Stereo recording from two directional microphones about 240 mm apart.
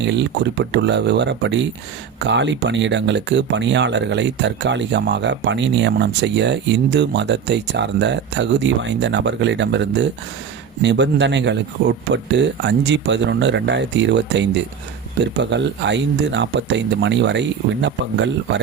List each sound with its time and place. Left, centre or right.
0.0 s speech: right